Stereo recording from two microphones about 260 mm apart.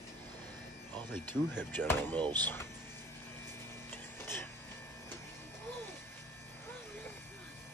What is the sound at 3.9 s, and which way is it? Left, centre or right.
Music, centre.